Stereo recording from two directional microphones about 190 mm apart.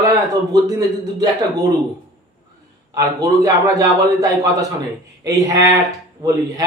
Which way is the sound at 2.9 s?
20° right (ahead or behind).